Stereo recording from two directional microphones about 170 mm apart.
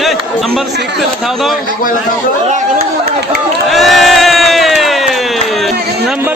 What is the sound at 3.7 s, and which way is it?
Crowd, centre (ahead or behind).